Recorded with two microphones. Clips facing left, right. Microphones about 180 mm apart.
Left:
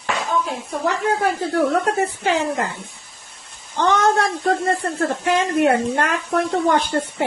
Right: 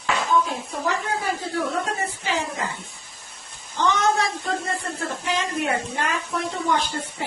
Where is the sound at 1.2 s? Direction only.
60° left (ahead or behind).